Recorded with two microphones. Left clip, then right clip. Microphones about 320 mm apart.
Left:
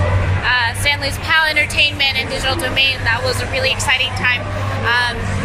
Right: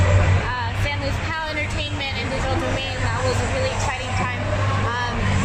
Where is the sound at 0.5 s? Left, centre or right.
Left.